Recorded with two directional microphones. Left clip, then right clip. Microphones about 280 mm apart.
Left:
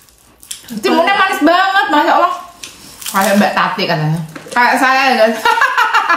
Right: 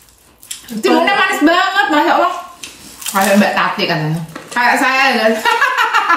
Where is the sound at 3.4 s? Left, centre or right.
Centre.